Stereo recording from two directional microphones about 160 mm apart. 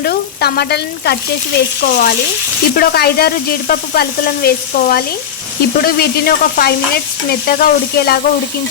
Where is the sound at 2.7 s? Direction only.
75° left (ahead or behind).